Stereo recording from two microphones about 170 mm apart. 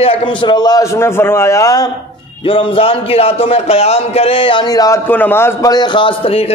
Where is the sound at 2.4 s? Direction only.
30° left (ahead or behind).